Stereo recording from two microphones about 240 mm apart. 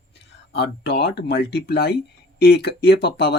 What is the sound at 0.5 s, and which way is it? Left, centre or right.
Speech, left.